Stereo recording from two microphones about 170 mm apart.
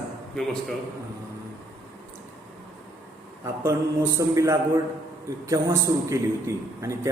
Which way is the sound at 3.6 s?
15° right (ahead or behind).